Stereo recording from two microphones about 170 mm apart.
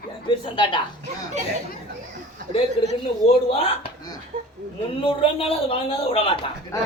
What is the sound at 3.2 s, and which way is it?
A man's voice, 35° left (ahead or behind).